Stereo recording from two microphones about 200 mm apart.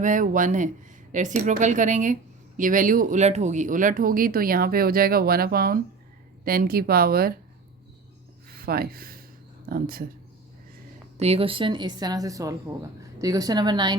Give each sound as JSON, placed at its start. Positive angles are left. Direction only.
{"t": 0.0, "sound": "speech", "side_deg": -40}
{"t": 8.4, "sound": "speech", "side_deg": -50}
{"t": 11.2, "sound": "a woman's voice", "side_deg": -30}